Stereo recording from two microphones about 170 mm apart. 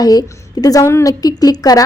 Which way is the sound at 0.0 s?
20° left (ahead or behind).